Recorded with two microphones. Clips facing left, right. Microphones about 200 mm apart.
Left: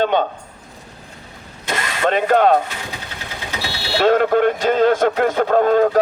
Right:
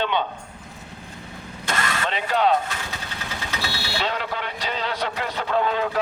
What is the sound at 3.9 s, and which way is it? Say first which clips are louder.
A man's voice: left 15 dB; 50° left (ahead or behind).